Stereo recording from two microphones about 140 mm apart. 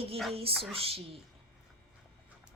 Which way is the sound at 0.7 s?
45° right (ahead or behind).